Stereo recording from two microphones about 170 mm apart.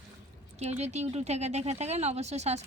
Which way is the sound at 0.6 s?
40° right (ahead or behind).